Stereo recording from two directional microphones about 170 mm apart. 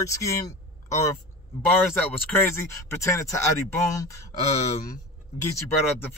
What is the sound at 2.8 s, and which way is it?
Speech, 15° left (ahead or behind).